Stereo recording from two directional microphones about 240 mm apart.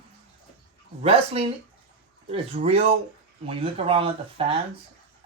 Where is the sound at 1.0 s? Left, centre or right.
Right.